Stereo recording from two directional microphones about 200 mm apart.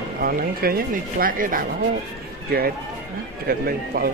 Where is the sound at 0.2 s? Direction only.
45° right (ahead or behind).